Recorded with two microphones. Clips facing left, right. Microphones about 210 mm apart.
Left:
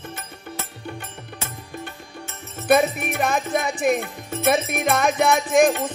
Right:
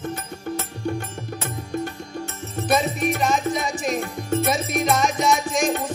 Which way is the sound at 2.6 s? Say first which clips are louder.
Left 3 dB; 60° left (ahead or behind).